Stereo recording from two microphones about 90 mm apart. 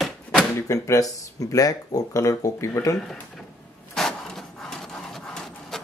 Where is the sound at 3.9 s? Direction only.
5° left (ahead or behind).